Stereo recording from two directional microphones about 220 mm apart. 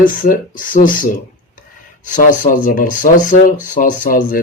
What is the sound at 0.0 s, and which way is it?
Speech, 40° left (ahead or behind).